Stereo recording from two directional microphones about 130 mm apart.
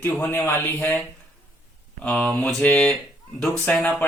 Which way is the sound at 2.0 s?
10° left (ahead or behind).